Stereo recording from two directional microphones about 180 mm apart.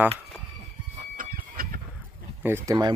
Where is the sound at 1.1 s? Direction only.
50° right (ahead or behind).